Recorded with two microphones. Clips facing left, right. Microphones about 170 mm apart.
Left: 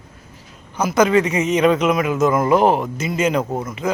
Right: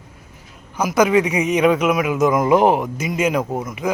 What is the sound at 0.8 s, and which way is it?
Speech, 10° right (ahead or behind).